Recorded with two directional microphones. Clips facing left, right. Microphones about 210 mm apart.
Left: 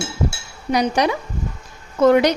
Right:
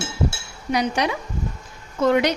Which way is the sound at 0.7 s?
40° left (ahead or behind).